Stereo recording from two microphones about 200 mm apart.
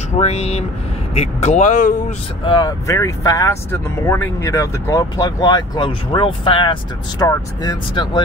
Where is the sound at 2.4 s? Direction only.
20° left (ahead or behind).